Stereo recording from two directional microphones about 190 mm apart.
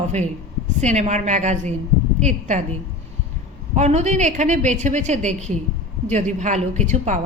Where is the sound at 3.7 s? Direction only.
35° right (ahead or behind).